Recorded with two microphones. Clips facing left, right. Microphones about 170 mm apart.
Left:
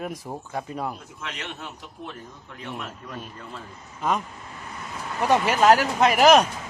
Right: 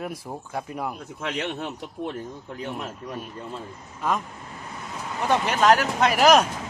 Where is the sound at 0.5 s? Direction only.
10° right (ahead or behind).